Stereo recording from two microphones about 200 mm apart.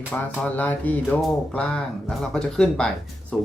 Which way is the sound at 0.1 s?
10° left (ahead or behind).